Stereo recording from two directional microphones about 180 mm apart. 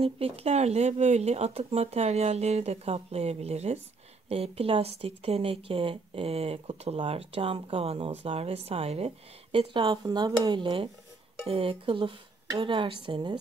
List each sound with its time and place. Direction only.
0.0 s a woman's voice: 35° right (ahead or behind)